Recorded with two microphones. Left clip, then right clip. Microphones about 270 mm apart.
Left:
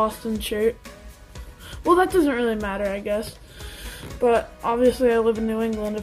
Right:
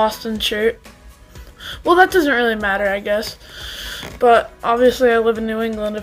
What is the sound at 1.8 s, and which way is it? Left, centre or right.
Speech, centre.